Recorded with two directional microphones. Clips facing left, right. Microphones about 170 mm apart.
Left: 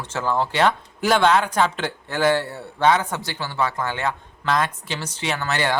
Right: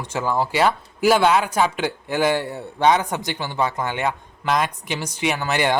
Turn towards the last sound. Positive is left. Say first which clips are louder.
# right 3 dB
turn(degrees=-15)  # may be behind; listen again after turning